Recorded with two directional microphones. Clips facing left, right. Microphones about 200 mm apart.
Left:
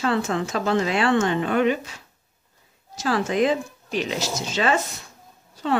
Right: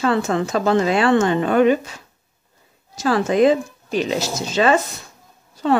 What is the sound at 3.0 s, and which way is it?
Speech, 40° right (ahead or behind).